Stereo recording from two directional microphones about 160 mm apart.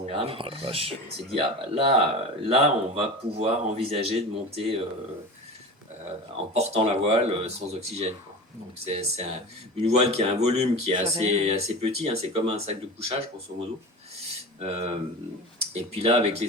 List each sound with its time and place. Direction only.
0.0 s speech: 40° right (ahead or behind)
6.5 s speech: 40° right (ahead or behind)
14.2 s a sound: 40° right (ahead or behind)
15.7 s speech: 40° right (ahead or behind)